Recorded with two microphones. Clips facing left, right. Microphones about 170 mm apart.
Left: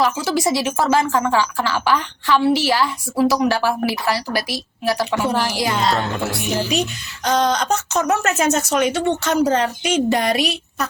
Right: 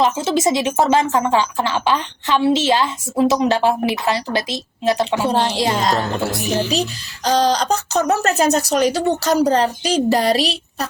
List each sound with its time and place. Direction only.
0.0 s a woman's voice: 20° right (ahead or behind)
5.8 s speech: 40° right (ahead or behind)